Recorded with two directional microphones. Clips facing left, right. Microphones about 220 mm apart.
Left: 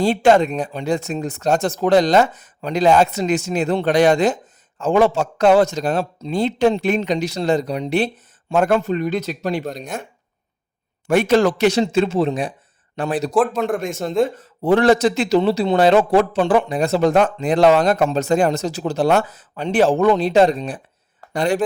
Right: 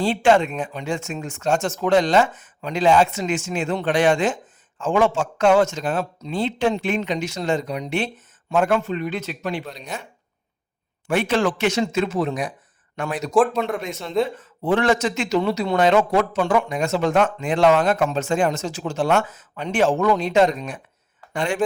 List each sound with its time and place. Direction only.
0.0 s speech: 40° left (ahead or behind)
11.1 s speech: 40° left (ahead or behind)
13.7 s speech: 50° left (ahead or behind)